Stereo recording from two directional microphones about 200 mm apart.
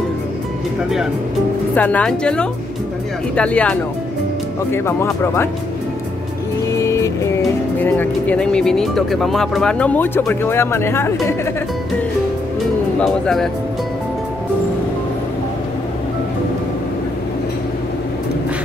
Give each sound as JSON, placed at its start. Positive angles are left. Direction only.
{"t": 1.8, "sound": "speech", "side_deg": 5}
{"t": 4.7, "sound": "speech", "side_deg": 10}
{"t": 6.8, "sound": "music", "side_deg": 15}
{"t": 7.8, "sound": "speech", "side_deg": 10}
{"t": 13.0, "sound": "speech", "side_deg": 0}